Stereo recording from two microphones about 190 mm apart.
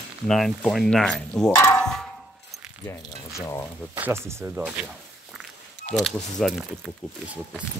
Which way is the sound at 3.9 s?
10° right (ahead or behind).